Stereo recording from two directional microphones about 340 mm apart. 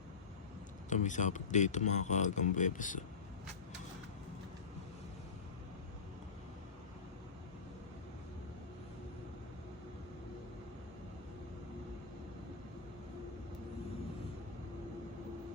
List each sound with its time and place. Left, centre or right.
0.9 s speech: left